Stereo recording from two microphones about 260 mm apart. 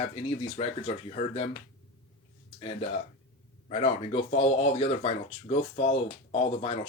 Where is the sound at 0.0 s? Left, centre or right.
Left.